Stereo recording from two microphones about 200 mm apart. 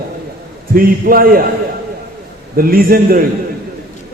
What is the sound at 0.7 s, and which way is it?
Speech, 45° right (ahead or behind).